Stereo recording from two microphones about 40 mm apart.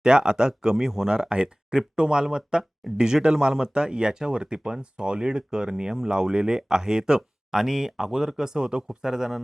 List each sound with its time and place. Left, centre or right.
0.0 s speech: centre